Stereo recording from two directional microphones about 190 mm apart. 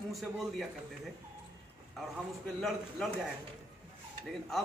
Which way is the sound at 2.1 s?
Centre (ahead or behind).